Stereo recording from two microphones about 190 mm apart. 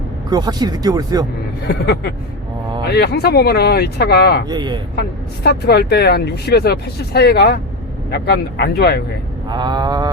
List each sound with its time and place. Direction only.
0.3 s speech: 20° right (ahead or behind)
1.6 s speech: 60° left (ahead or behind)
4.4 s speech: 20° right (ahead or behind)
4.9 s speech: 55° left (ahead or behind)
9.5 s speech: 20° right (ahead or behind)